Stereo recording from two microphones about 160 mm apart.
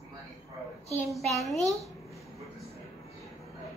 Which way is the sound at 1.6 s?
20° right (ahead or behind).